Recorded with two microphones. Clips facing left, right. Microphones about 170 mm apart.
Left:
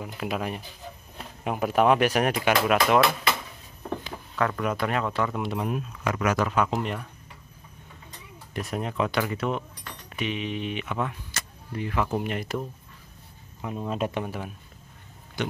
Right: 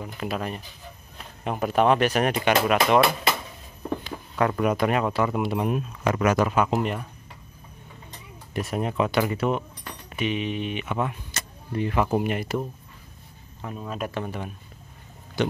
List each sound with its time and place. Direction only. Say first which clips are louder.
0.0 s speech: even; 5° left (ahead or behind)
4.4 s speech: right 4 dB; 15° right (ahead or behind)
5.7 s speech: right 4 dB; 25° right (ahead or behind)
6.3 s speech: right 3 dB; 10° right (ahead or behind)
8.5 s speech: right 3 dB; 5° right (ahead or behind)
11.3 s vehicle: right 2 dB; 20° right (ahead or behind)
11.7 s speech: right 5 dB; 25° right (ahead or behind)
12.0 s speech: right 3 dB; 10° right (ahead or behind)
13.6 s speech: left 2 dB; 15° left (ahead or behind)
13.8 s speech: left 2 dB; 25° left (ahead or behind)
14.2 s speech: right 1 dB; 5° left (ahead or behind)